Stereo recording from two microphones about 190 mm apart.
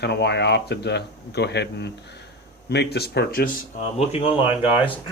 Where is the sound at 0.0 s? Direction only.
60° left (ahead or behind); by 4.4 s 30° left (ahead or behind).